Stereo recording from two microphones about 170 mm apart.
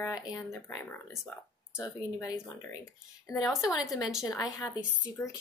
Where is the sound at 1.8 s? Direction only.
20° left (ahead or behind).